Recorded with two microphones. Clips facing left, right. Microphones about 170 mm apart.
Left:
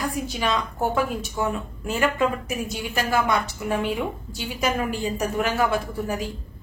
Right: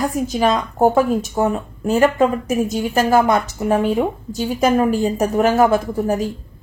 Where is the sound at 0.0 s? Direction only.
45° right (ahead or behind).